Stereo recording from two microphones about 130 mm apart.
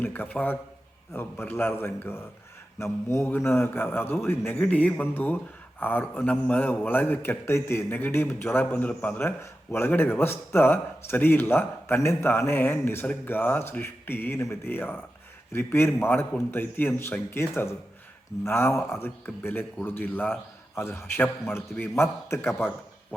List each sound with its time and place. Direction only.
0.0 s a man's voice: 15° left (ahead or behind)